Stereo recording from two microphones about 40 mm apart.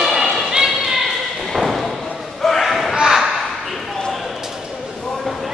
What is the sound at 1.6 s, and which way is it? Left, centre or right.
Slam, centre.